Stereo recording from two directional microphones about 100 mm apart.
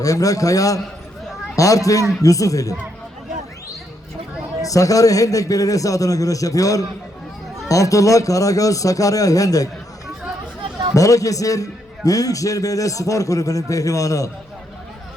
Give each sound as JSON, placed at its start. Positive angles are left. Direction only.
{"t": 0.0, "sound": "a man's voice", "side_deg": 35}
{"t": 4.6, "sound": "a man's voice", "side_deg": 35}
{"t": 10.6, "sound": "a sound", "side_deg": -50}
{"t": 10.9, "sound": "a man's voice", "side_deg": 35}